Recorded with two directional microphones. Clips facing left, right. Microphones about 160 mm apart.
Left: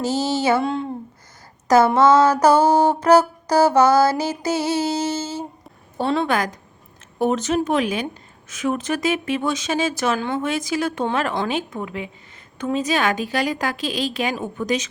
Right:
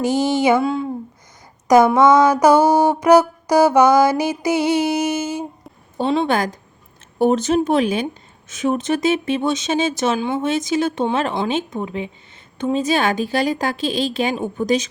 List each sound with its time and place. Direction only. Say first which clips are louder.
0.0 s mantra: right 4 dB; 15° right (ahead or behind)
0.6 s speech: right 3 dB; centre (ahead or behind)
1.6 s mantra: right 2 dB; 15° right (ahead or behind)
6.2 s speech: right 2 dB; 30° right (ahead or behind)